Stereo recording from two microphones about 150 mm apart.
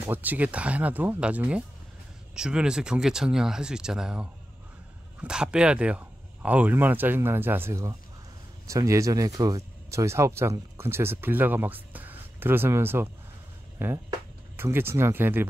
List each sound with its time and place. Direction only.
0.0 s speech: 10° right (ahead or behind)